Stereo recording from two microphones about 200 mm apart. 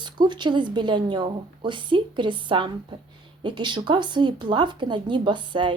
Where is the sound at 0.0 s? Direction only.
20° right (ahead or behind).